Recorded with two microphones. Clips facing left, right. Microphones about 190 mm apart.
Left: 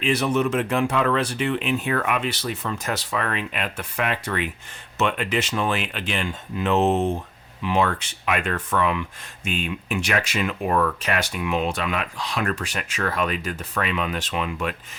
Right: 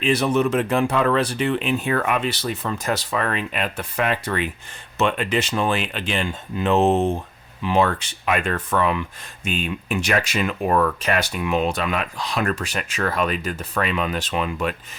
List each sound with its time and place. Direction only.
0.0 s speech: 35° right (ahead or behind)